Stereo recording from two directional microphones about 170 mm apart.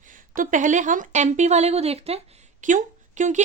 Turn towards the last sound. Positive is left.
turn(degrees=-45)  # may be behind; listen again after turning